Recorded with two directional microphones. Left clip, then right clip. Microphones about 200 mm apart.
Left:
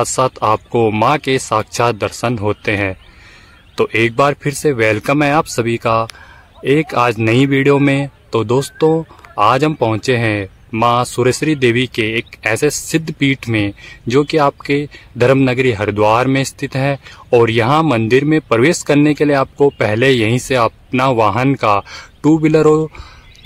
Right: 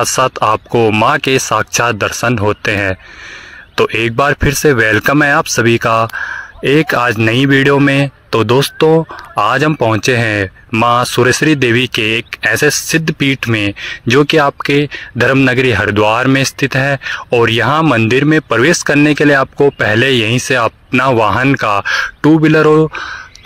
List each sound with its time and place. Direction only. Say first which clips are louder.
0.0 s speech: right 3 dB; 15° right (ahead or behind)
22.7 s speech: right 3 dB; 25° right (ahead or behind)